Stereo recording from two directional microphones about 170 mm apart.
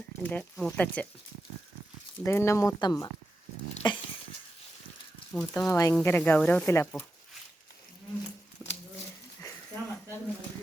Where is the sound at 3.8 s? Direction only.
25° left (ahead or behind).